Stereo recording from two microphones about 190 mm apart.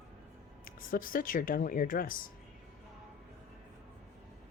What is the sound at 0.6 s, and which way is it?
Speech, 45° left (ahead or behind).